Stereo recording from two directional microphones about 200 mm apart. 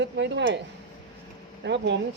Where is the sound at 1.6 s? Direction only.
60° right (ahead or behind).